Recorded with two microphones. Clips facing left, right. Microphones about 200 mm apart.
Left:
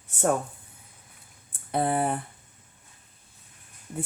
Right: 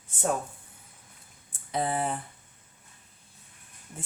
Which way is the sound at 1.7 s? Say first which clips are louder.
Left 4 dB; 55° left (ahead or behind).